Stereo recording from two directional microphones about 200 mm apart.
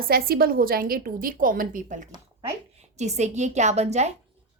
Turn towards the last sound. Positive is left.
turn(degrees=-35)  # may be behind; listen again after turning